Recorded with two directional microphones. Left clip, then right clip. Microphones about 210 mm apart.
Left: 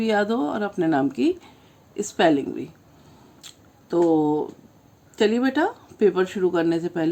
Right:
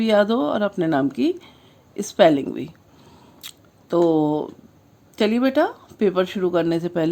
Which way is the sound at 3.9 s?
30° right (ahead or behind).